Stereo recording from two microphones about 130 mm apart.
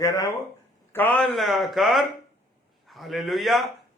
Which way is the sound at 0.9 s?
15° left (ahead or behind).